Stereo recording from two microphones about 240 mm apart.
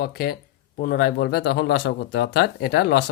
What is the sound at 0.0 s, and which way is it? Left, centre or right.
Speech, left.